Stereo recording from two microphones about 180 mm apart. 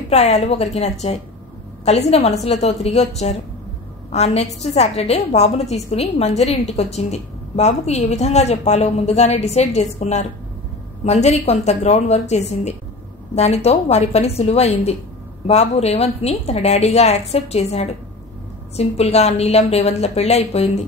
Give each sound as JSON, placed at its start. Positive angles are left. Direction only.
{"t": 0.1, "sound": "a woman's voice", "side_deg": 40}